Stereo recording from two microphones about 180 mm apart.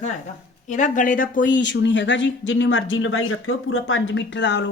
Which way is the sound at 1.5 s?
80° left.